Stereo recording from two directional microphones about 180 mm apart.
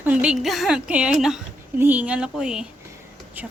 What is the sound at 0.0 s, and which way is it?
A woman's voice, 5° right (ahead or behind).